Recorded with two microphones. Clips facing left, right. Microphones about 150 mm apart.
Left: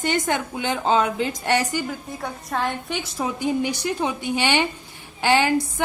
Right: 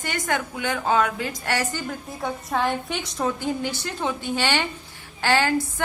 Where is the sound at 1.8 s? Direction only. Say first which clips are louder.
Right 1 dB; centre (ahead or behind); by 5.8 s 15° left (ahead or behind).